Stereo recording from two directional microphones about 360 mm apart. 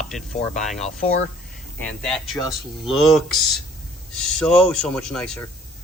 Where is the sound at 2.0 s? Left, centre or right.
Centre.